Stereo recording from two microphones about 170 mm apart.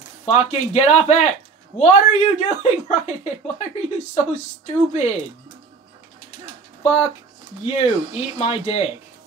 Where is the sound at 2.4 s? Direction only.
40° left (ahead or behind).